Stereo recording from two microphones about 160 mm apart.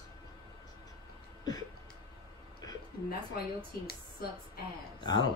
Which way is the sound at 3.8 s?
75° left (ahead or behind).